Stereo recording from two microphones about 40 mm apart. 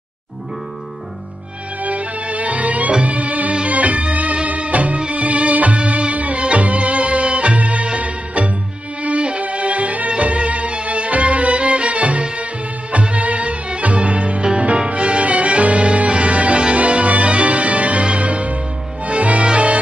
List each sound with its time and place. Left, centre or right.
1.8 s music: right